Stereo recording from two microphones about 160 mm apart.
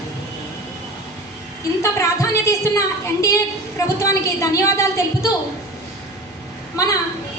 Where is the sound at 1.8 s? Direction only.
20° left (ahead or behind).